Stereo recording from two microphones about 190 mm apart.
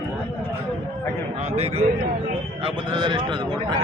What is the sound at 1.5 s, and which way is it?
Speech, 35° right (ahead or behind).